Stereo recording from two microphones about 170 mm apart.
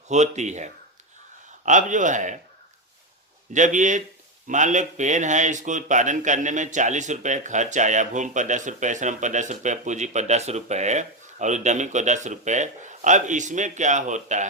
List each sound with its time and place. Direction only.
0.1 s speech: 45° right (ahead or behind)
3.5 s speech: 45° right (ahead or behind)